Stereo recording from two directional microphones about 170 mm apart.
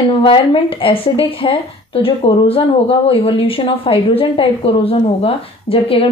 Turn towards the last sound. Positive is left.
turn(degrees=35)  # may be behind; listen again after turning